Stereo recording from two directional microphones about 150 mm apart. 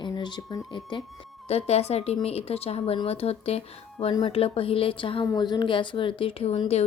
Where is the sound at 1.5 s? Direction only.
45° left (ahead or behind).